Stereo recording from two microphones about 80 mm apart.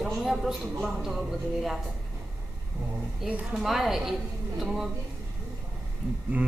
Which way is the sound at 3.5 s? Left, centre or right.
Centre.